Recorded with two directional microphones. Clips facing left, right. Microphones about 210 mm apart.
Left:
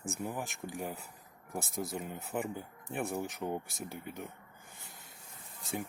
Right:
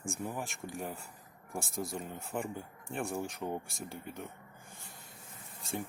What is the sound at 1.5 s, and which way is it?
Speech, 20° left (ahead or behind).